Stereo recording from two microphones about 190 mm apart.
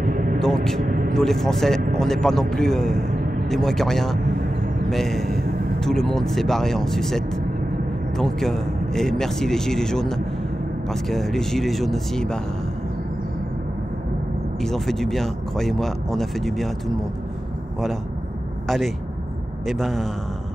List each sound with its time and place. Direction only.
0.0 s vehicle: 45° right (ahead or behind)
1.1 s speech: centre (ahead or behind)
14.6 s speech: centre (ahead or behind)
19.6 s speech: centre (ahead or behind)